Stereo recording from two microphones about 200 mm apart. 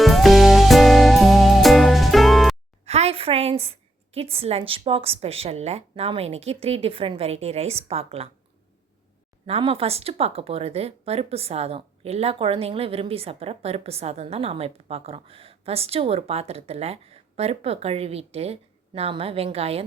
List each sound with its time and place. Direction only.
0.0 s music: centre (ahead or behind)
2.8 s a woman's voice: 30° right (ahead or behind)
9.5 s speech: 30° right (ahead or behind)